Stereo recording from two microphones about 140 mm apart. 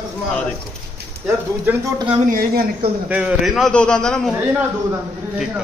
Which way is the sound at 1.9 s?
35° right (ahead or behind).